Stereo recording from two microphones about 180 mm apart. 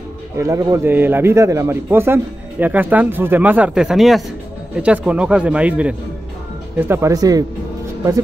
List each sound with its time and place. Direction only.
0.4 s a man's voice: 15° right (ahead or behind)